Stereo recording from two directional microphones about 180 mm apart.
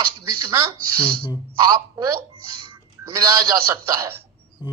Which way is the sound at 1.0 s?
30° left (ahead or behind).